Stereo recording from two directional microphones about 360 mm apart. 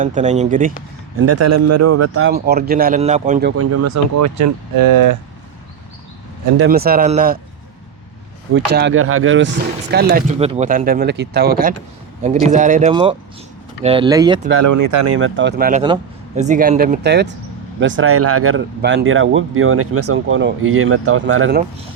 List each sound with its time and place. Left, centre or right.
0.0 s speech: centre
1.2 s speech: right; by 3.5 s centre
3.5 s speech: right
6.7 s speech: right
8.5 s speech: right; by 14.4 s centre
14.6 s speech: right
15.0 s speech: right